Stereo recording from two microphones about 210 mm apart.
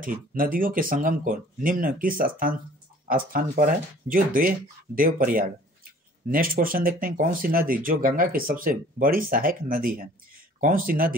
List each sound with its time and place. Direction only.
0.0 s speech: 40° right (ahead or behind)